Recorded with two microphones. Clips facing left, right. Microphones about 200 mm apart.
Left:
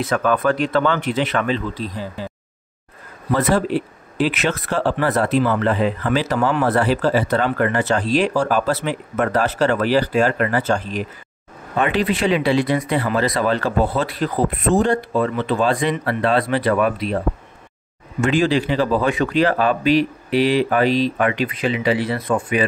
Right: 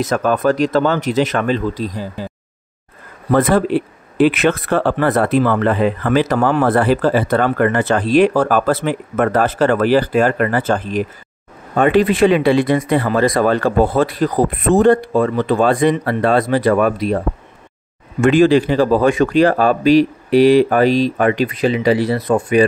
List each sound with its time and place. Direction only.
0.0 s speech: 40° right (ahead or behind)
3.3 s speech: 55° right (ahead or behind)
14.7 s speech: 55° right (ahead or behind)
18.2 s speech: 55° right (ahead or behind); by 22.7 s 40° right (ahead or behind)